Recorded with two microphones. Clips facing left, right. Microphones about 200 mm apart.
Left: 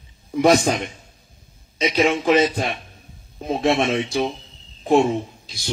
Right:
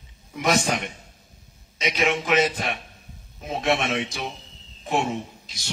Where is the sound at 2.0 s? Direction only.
30° left (ahead or behind).